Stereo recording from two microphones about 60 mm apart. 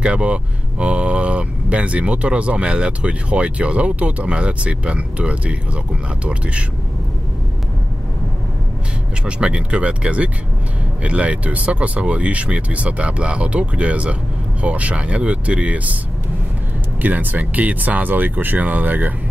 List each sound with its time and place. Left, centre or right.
0.0 s speech: centre
9.2 s speech: centre
17.0 s speech: right